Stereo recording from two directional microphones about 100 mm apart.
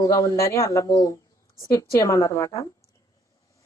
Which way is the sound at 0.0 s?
35° left (ahead or behind).